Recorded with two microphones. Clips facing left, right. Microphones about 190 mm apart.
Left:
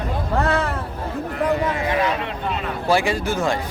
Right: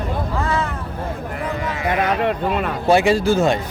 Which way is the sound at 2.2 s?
55° right (ahead or behind).